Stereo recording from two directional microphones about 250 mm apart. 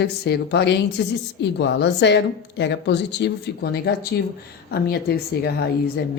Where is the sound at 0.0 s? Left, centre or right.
Left.